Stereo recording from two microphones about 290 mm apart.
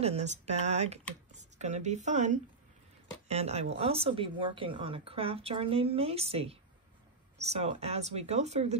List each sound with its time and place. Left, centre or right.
0.0 s a woman's voice: right